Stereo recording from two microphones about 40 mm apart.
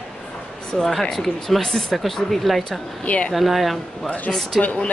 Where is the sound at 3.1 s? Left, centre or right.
Left.